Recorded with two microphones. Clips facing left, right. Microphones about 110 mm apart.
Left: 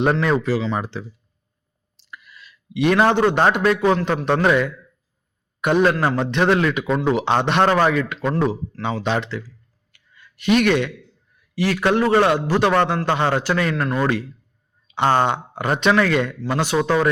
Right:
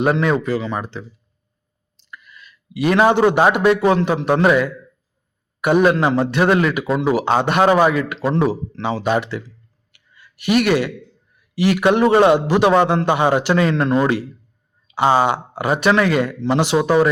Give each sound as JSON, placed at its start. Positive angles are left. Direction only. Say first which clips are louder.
{"t": 0.0, "sound": "a man's voice", "louder": "right 1 dB", "side_deg": -5}
{"t": 9.9, "sound": "a sound", "louder": "right 1 dB", "side_deg": -10}
{"t": 11.5, "sound": "speech", "louder": "right 3 dB", "side_deg": -15}
{"t": 14.8, "sound": "speech", "louder": "right 2 dB", "side_deg": -5}
{"t": 16.4, "sound": "speech", "louder": "right 4 dB", "side_deg": -20}